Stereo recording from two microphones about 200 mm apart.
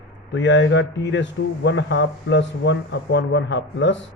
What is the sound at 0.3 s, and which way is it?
Speech, 65° left (ahead or behind).